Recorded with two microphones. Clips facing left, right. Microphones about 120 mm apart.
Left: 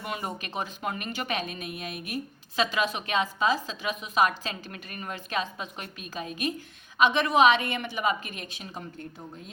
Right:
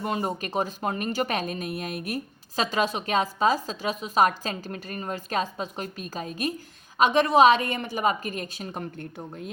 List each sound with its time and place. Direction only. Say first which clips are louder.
0.0 s speech: right 6 dB; 35° right (ahead or behind)
8.8 s a woman's voice: right 5 dB; 60° right (ahead or behind)